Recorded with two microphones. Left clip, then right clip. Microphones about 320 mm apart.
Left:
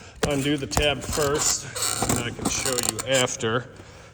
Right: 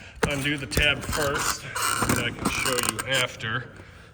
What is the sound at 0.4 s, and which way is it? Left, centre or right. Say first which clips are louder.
Speech: right 1 dB; centre.